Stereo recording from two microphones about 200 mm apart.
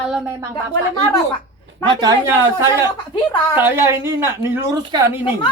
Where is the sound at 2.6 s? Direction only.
15° right (ahead or behind).